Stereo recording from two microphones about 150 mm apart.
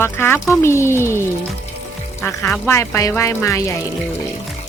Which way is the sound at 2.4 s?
5° left (ahead or behind).